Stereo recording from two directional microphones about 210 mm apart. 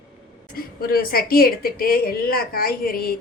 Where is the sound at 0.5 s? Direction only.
45° left (ahead or behind).